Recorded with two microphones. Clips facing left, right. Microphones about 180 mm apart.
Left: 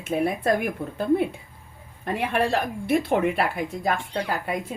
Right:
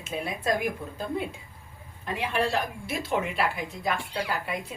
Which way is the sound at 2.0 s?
55° left (ahead or behind).